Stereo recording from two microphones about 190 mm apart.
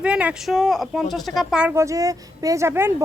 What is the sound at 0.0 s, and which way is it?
Speech, 5° right (ahead or behind).